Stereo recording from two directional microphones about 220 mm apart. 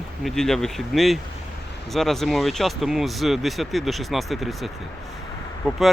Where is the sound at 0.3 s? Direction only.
Centre (ahead or behind).